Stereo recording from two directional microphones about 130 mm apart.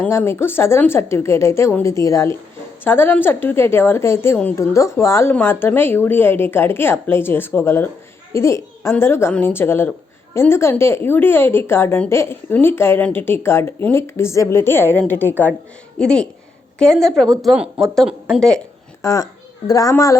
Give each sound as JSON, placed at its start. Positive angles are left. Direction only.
{"t": 0.0, "sound": "a woman's voice", "side_deg": 15}
{"t": 19.0, "sound": "a child's voice", "side_deg": 25}